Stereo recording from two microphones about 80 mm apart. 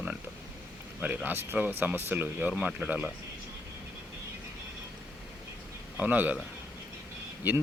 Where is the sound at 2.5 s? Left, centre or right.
Centre.